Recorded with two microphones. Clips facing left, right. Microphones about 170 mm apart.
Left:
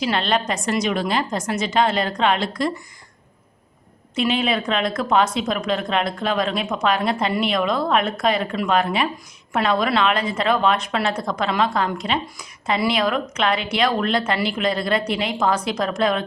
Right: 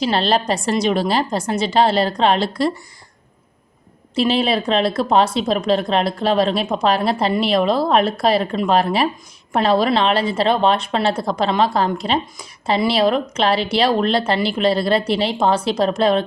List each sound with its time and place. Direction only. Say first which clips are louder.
0.0 s a woman's voice: right 3 dB; 35° right (ahead or behind)
4.1 s a woman's voice: right 3 dB; 35° right (ahead or behind)